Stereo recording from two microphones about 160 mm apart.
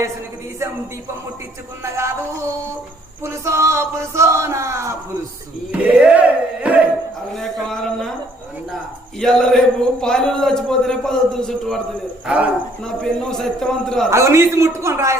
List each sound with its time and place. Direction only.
1.8 s speech: 15° right (ahead or behind)
3.2 s speech: 15° right (ahead or behind)
5.7 s music: 5° right (ahead or behind)
7.3 s a man's voice: centre (ahead or behind)
9.2 s a man's voice: 5° left (ahead or behind)
12.2 s speech: 10° right (ahead or behind)
12.8 s a man's voice: 5° left (ahead or behind)
14.1 s speech: 15° right (ahead or behind)